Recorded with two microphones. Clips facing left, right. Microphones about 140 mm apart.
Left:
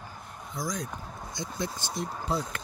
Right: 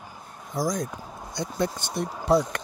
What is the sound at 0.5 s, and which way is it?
Speech, 45° right (ahead or behind).